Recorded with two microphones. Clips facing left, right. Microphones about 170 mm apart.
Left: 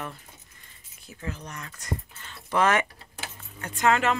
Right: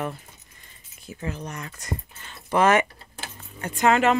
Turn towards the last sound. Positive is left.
turn(degrees=-20)  # may be behind; listen again after turning